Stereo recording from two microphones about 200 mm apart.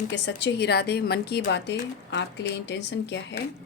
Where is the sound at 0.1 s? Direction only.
60° left (ahead or behind).